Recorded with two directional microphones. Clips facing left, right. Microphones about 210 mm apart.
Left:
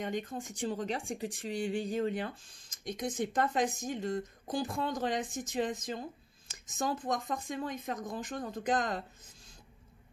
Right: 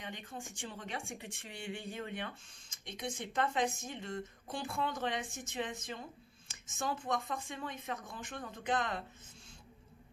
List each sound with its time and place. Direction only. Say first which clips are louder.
0.0 s speech: left 9 dB; 45° left (ahead or behind)